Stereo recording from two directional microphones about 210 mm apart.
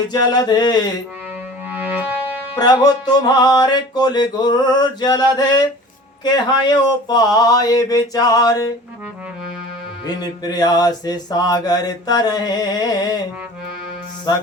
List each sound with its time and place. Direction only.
0.1 s mantra: 20° left (ahead or behind)
1.7 s music: 5° right (ahead or behind)
2.6 s mantra: 20° left (ahead or behind)
6.2 s a sound: 20° left (ahead or behind)
10.2 s mantra: 20° left (ahead or behind)